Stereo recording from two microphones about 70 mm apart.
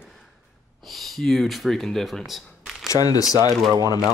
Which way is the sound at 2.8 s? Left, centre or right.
Left.